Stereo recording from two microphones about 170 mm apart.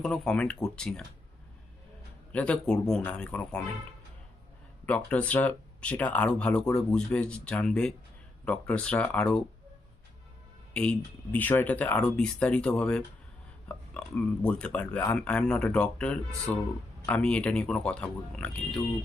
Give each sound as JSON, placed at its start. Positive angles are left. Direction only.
{"t": 0.0, "sound": "speech", "side_deg": 5}
{"t": 2.3, "sound": "speech", "side_deg": 5}
{"t": 4.9, "sound": "speech", "side_deg": 10}
{"t": 10.8, "sound": "speech", "side_deg": 10}